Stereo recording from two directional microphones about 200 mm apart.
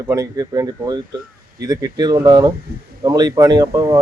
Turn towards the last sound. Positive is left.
turn(degrees=-15)  # may be behind; listen again after turning